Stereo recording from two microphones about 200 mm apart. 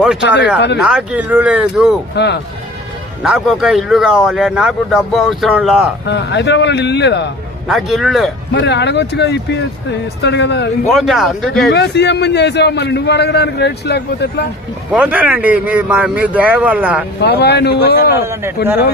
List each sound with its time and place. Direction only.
0.0 s a man's voice: centre (ahead or behind)
2.1 s a man's voice: 55° left (ahead or behind)
3.2 s speech: 5° right (ahead or behind)
6.1 s a man's voice: 60° left (ahead or behind)
7.7 s speech: centre (ahead or behind)
8.5 s a man's voice: 60° left (ahead or behind)
10.9 s speech: centre (ahead or behind)
11.7 s a man's voice: 60° left (ahead or behind)
14.9 s a man's voice: 5° right (ahead or behind)
17.2 s a man's voice: 50° left (ahead or behind)
18.2 s a man's voice: 15° right (ahead or behind)